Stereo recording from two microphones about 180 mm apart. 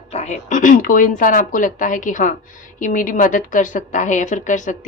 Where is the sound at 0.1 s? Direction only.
40° left (ahead or behind).